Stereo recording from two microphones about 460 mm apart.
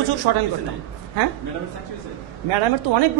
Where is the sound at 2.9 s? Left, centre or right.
Right.